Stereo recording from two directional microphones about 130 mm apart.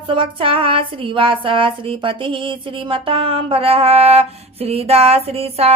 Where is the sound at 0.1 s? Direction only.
40° right (ahead or behind).